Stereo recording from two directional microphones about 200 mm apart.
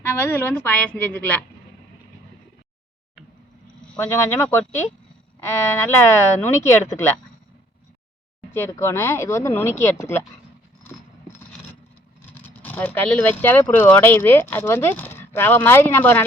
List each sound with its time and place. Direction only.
0.0 s speech: 10° left (ahead or behind)
3.9 s speech: 10° left (ahead or behind)
8.5 s speech: 10° left (ahead or behind)
10.8 s a sound: 10° left (ahead or behind)
12.3 s speech: 10° left (ahead or behind)